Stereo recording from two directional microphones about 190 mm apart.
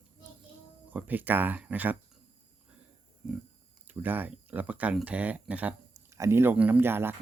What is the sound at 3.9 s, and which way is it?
Speech, 10° right (ahead or behind).